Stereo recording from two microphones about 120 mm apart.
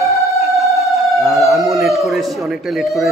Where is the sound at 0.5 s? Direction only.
Centre (ahead or behind).